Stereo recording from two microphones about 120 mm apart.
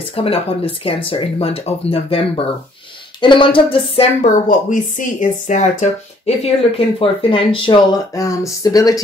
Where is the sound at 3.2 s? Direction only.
45° left (ahead or behind).